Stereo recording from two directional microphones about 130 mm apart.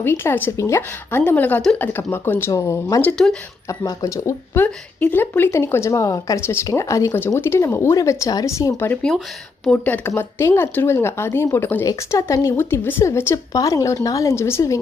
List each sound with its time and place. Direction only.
0.0 s a woman's voice: 20° left (ahead or behind)
3.0 s a woman's voice: 10° left (ahead or behind)
3.7 s a woman's voice: 25° left (ahead or behind)